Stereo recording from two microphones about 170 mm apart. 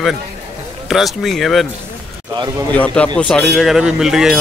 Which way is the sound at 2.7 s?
5° left (ahead or behind).